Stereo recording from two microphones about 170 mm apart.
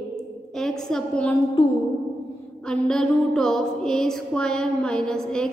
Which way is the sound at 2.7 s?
5° left (ahead or behind).